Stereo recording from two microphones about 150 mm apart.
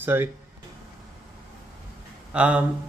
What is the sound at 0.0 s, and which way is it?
Speech, 15° right (ahead or behind).